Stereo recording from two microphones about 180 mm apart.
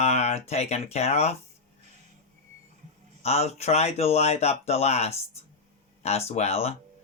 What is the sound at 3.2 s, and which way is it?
Speech, 35° left (ahead or behind).